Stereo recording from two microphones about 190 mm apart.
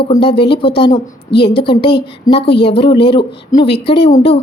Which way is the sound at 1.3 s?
60° left (ahead or behind).